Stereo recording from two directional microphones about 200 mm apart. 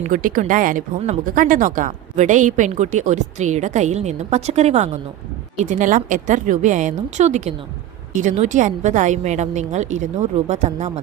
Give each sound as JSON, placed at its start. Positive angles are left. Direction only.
{"t": 0.0, "sound": "a woman's voice", "side_deg": -40}